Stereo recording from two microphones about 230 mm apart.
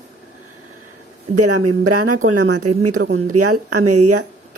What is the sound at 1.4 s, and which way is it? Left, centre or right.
Speech, right.